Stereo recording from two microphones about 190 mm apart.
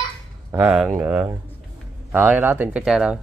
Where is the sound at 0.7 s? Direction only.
5° right (ahead or behind).